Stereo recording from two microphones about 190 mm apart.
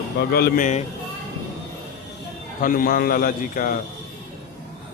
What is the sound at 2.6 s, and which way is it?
A man's voice, 45° left (ahead or behind).